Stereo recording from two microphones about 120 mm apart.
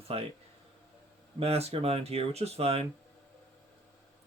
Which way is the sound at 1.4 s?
60° right (ahead or behind).